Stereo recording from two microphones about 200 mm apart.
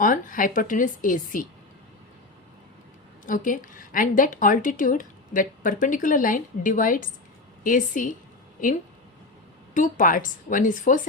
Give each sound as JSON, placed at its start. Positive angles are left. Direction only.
{"t": 0.0, "sound": "a woman's voice", "side_deg": 45}
{"t": 3.2, "sound": "a woman's voice", "side_deg": 40}